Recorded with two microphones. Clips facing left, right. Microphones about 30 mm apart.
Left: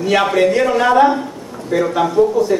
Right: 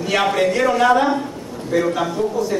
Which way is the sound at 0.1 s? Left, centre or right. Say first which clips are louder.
Left 4 dB; centre.